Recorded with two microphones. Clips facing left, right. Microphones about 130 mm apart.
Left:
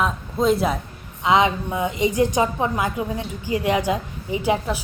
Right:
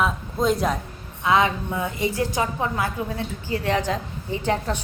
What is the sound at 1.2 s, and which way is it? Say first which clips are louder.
A woman's voice: left 2 dB; 20° left (ahead or behind).